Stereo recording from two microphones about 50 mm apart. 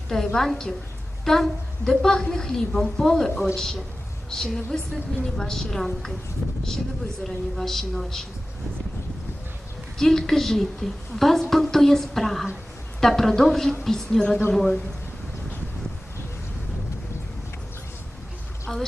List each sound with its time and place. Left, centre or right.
0.3 s a woman's voice: centre
6.4 s speech: right
7.3 s a woman's voice: centre
10.0 s a woman's voice: centre
18.7 s a woman's voice: centre